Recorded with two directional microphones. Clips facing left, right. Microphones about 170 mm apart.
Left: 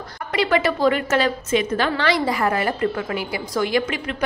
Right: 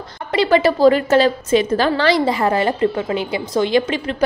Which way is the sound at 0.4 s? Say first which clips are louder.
Right 6 dB; 30° right (ahead or behind).